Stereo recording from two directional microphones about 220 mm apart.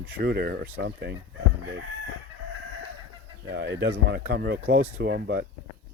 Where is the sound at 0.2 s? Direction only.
45° right (ahead or behind).